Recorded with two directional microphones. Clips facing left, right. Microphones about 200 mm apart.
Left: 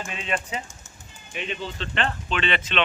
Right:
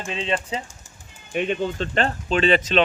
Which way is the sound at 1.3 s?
50° right (ahead or behind).